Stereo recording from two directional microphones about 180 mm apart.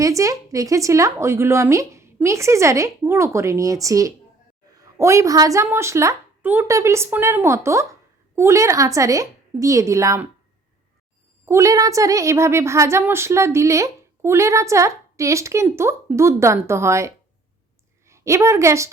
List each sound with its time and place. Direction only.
0.0 s a woman's voice: 20° right (ahead or behind)
11.4 s a woman's voice: 15° right (ahead or behind)